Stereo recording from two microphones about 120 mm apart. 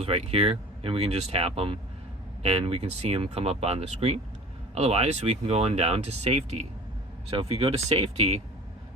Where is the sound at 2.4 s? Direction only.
65° right (ahead or behind).